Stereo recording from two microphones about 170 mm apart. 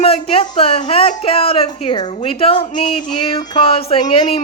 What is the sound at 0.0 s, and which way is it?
Speech, 35° left (ahead or behind).